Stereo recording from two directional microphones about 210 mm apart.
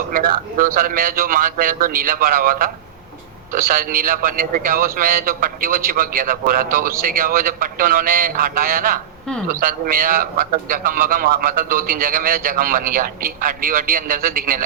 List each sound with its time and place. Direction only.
0.1 s a man's voice: 40° right (ahead or behind)